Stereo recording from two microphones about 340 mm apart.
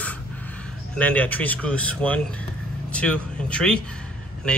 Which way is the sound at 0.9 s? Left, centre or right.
Centre.